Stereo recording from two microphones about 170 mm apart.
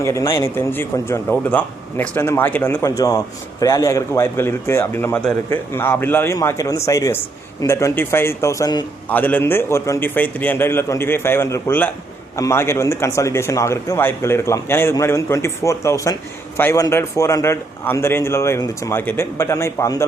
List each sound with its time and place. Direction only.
0.0 s a man's voice: 15° left (ahead or behind)
9.0 s a man's voice: 10° left (ahead or behind)